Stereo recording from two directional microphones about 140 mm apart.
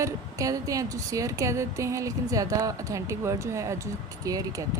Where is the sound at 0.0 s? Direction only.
25° right (ahead or behind).